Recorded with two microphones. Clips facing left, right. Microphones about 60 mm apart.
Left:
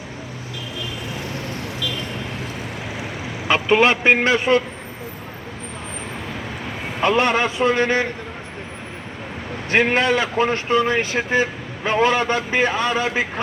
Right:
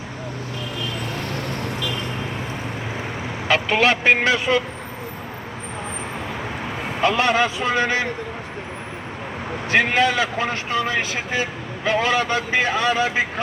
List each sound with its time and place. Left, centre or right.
3.5 s a man's voice: left
7.0 s a man's voice: left
9.6 s a man's voice: left